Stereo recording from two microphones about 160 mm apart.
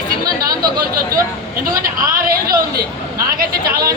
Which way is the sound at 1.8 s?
60° right (ahead or behind).